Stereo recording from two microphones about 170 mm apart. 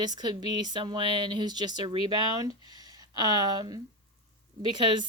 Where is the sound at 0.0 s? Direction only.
25° right (ahead or behind).